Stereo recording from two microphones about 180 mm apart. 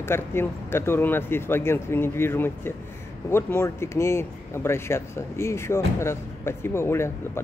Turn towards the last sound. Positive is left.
turn(degrees=15)  # may be behind; listen again after turning